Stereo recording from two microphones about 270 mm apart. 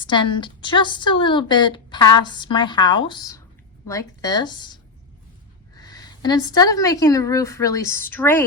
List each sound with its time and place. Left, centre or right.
0.0 s a woman's voice: centre